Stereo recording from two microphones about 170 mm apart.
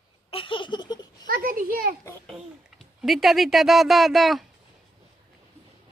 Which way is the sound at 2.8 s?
Centre (ahead or behind).